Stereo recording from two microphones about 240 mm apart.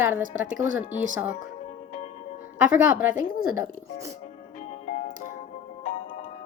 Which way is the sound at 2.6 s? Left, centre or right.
Centre.